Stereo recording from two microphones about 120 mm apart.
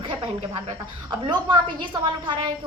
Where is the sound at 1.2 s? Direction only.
45° right (ahead or behind).